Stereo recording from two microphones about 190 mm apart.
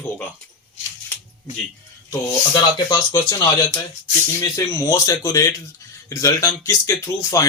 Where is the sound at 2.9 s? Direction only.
20° left (ahead or behind).